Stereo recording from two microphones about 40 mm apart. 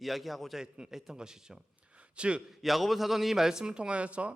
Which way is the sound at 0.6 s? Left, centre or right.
Centre.